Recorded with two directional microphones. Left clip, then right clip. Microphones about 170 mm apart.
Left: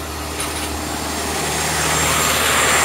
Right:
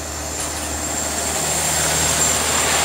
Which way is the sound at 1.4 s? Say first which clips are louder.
Left 2 dB; 15° right (ahead or behind).